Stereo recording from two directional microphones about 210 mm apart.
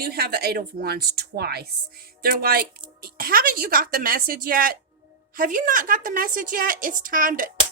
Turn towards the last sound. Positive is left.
turn(degrees=-40)  # may be behind; listen again after turning